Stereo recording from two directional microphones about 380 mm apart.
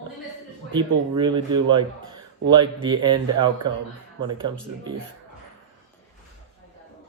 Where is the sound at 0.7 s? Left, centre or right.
Centre.